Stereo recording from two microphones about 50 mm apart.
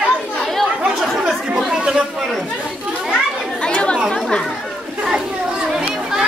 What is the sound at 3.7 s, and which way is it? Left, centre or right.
Chatter, left.